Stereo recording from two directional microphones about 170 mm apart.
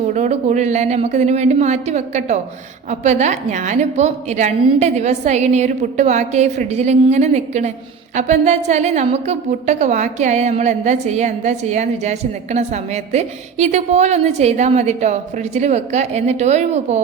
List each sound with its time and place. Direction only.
0.1 s a woman's voice: 45° right (ahead or behind)